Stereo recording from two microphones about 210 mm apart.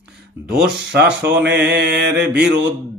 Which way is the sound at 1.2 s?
55° right (ahead or behind).